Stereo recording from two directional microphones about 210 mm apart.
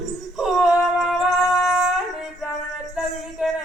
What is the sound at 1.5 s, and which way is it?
Shofar, centre (ahead or behind).